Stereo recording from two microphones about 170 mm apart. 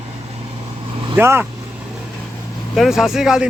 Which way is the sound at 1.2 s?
15° right (ahead or behind).